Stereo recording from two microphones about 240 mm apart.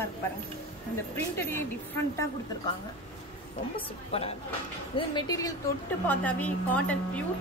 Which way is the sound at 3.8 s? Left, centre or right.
Left.